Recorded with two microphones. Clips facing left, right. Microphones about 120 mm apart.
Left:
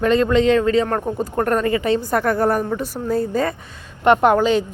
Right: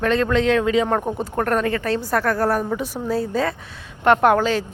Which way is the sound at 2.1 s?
20° left (ahead or behind).